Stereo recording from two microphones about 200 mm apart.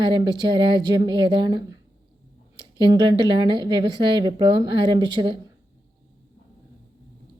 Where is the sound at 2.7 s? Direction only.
25° right (ahead or behind).